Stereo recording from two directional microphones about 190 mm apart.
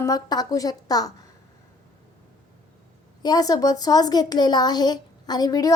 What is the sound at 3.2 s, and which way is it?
Speech, 20° left (ahead or behind).